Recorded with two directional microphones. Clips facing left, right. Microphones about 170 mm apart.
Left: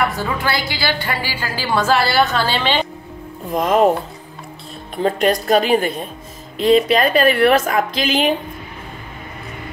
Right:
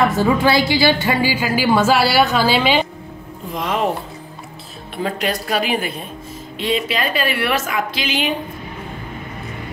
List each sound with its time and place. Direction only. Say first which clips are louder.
0.0 s a woman's voice: right 5 dB; 20° right (ahead or behind)
3.5 s a woman's voice: left 6 dB; 45° left (ahead or behind)
4.9 s a woman's voice: left 5 dB; 45° left (ahead or behind)
6.9 s a woman's voice: left 7 dB; 45° left (ahead or behind)